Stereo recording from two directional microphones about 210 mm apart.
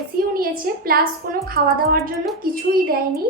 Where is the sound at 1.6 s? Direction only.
45° right (ahead or behind).